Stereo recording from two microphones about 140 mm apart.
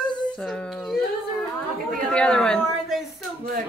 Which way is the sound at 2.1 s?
5° left (ahead or behind).